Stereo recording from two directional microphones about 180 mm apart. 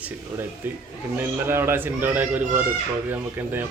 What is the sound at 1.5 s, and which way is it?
Speech, 10° right (ahead or behind).